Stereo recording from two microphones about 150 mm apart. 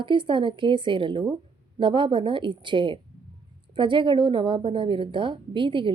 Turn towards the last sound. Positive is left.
turn(degrees=-35)  # may be behind; listen again after turning